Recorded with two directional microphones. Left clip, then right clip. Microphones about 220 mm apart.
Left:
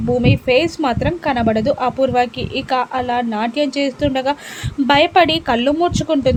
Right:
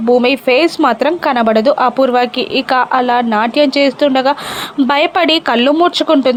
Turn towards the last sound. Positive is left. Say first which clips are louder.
# right 5 dB
turn(degrees=-15)  # may be behind; listen again after turning